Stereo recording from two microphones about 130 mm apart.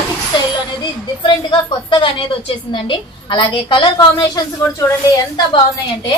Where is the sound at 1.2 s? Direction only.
35° left (ahead or behind).